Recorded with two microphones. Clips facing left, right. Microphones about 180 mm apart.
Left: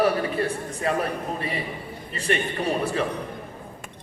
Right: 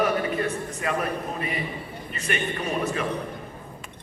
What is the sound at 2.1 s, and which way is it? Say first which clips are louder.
Speech: left 3 dB; 30° left (ahead or behind).